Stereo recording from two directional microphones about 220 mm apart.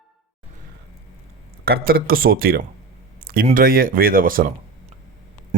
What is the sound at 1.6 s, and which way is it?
Speech, 45° right (ahead or behind).